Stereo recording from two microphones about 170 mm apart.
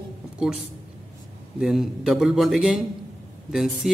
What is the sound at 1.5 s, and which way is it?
A man's voice, centre (ahead or behind).